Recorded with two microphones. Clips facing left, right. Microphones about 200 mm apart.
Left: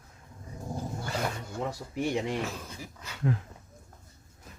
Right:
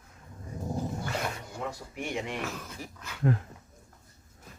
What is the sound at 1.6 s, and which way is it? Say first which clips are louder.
Speech: left 4 dB; 35° left (ahead or behind).